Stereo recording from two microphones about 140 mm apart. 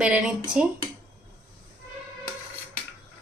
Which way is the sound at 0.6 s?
70° right (ahead or behind).